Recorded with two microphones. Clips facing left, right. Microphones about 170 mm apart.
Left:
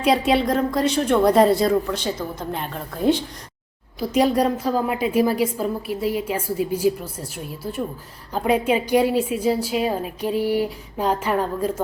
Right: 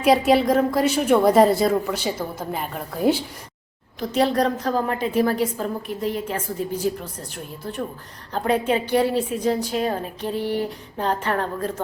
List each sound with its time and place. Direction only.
0.0 s a woman's voice: centre (ahead or behind)
4.0 s a woman's voice: 10° left (ahead or behind)